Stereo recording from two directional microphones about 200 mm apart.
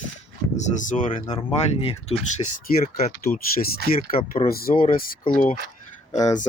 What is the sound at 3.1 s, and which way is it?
Speech, 50° left (ahead or behind).